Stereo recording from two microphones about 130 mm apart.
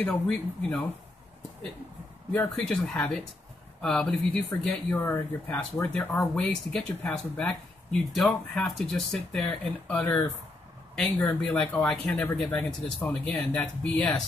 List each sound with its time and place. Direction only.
0.0 s speech: 10° left (ahead or behind)
2.3 s speech: 5° left (ahead or behind)